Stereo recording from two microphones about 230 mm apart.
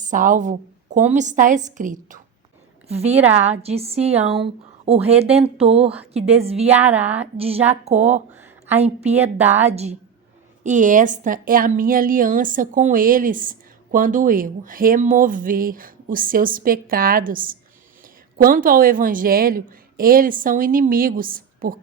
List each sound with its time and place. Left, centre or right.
0.0 s a woman's voice: right